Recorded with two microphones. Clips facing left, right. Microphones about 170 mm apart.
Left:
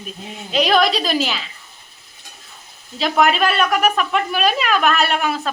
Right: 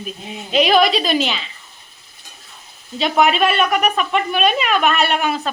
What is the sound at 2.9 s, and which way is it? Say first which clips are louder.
Speech: right 1 dB; centre (ahead or behind).